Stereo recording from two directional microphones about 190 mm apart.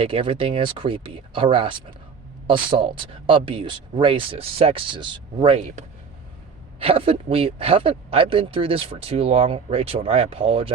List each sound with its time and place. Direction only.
0.0 s speech: 30° right (ahead or behind)